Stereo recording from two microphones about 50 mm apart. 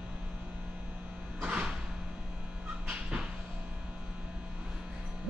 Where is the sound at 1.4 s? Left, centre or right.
Centre.